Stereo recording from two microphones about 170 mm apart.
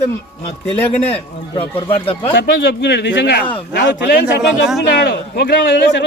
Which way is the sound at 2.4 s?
90° left.